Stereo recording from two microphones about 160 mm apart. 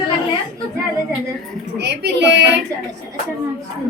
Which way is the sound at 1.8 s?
90° right.